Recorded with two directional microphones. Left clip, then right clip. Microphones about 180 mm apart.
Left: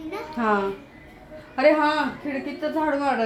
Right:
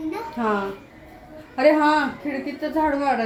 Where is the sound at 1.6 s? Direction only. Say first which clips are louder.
Right 1 dB; 15° left (ahead or behind).